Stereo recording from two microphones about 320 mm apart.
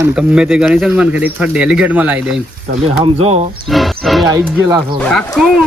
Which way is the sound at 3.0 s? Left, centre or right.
Centre.